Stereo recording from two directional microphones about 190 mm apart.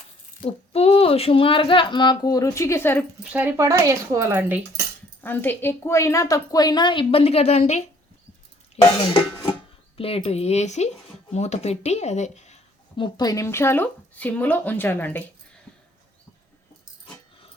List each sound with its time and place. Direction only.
0.4 s a woman's voice: 30° left (ahead or behind); by 3.0 s 10° left (ahead or behind)
3.3 s speech: 10° right (ahead or behind)
5.2 s a woman's voice: 10° left (ahead or behind); by 12.5 s 35° left (ahead or behind)
13.0 s speech: 20° left (ahead or behind)